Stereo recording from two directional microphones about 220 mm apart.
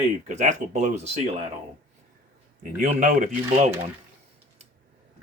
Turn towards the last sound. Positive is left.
turn(degrees=-35)  # may be behind; listen again after turning